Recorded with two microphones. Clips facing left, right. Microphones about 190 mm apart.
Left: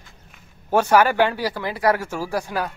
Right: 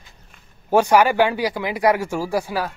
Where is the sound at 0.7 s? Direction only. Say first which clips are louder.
Right 1 dB; 15° right (ahead or behind).